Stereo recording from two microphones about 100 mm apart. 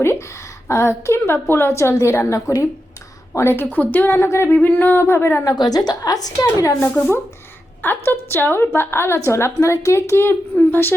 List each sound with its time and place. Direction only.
0.0 s a woman's voice: 25° left (ahead or behind)
5.4 s a woman's voice: 40° left (ahead or behind)
7.8 s a woman's voice: 20° left (ahead or behind)